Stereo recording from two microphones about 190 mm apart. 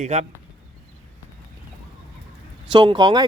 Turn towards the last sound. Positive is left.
turn(degrees=-20)  # may be behind; listen again after turning